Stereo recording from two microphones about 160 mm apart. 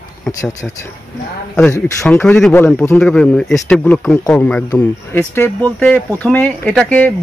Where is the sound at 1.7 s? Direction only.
15° left (ahead or behind).